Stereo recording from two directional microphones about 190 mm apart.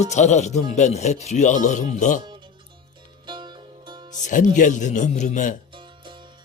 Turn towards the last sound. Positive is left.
turn(degrees=-25)  # may be behind; listen again after turning